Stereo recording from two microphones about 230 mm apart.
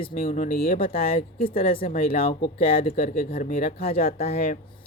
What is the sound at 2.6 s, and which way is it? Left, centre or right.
Speech, left.